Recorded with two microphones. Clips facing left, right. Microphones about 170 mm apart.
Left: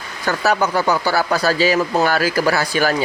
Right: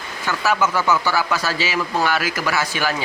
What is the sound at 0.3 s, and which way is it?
Speech, 40° left (ahead or behind).